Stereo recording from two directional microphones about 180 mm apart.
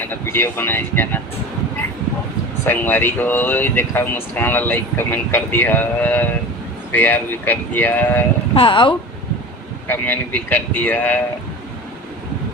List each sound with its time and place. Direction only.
0.0 s speech: 10° left (ahead or behind)
2.6 s speech: 10° left (ahead or behind)
8.5 s speech: 25° left (ahead or behind)
9.8 s speech: 10° left (ahead or behind)